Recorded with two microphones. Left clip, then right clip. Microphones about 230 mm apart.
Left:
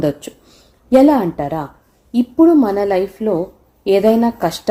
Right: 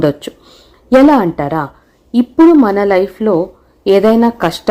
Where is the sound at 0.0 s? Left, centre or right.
Centre.